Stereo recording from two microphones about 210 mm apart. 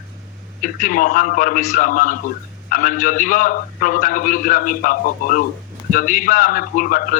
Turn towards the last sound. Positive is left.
turn(degrees=40)  # may be behind; listen again after turning